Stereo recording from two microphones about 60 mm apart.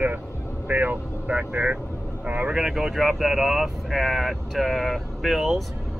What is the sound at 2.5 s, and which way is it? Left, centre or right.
Speech, centre.